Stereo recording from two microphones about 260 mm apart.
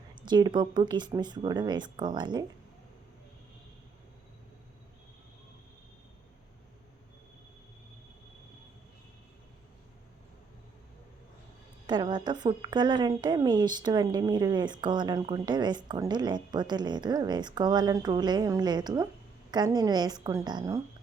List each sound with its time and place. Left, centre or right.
0.2 s a woman's voice: centre
11.9 s a woman's voice: centre